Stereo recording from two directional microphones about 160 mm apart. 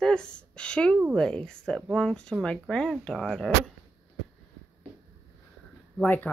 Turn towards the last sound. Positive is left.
turn(degrees=10)  # may be behind; listen again after turning